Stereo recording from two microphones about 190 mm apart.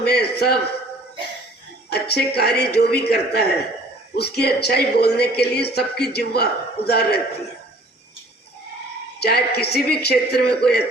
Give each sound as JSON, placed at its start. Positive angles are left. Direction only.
{"t": 0.0, "sound": "speech", "side_deg": 60}
{"t": 1.9, "sound": "speech", "side_deg": 60}
{"t": 9.2, "sound": "speech", "side_deg": 55}